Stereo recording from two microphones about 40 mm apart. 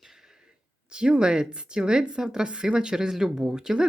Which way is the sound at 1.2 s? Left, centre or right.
Right.